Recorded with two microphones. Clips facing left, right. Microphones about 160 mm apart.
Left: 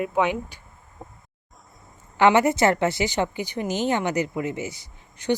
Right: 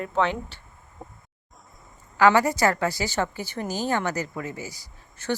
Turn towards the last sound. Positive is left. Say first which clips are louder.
# left 4 dB
turn(degrees=20)  # may be behind; listen again after turning